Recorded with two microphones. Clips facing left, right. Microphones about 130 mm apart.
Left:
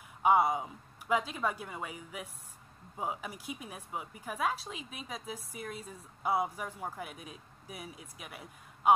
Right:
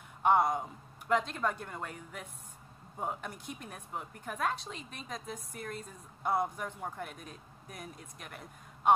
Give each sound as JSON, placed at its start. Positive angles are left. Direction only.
{"t": 0.2, "sound": "speech", "side_deg": 5}